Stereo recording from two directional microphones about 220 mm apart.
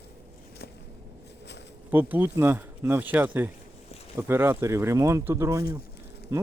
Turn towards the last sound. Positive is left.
turn(degrees=-10)  # may be behind; listen again after turning